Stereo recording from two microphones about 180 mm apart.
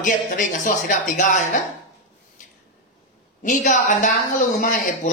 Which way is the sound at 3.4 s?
45° left (ahead or behind).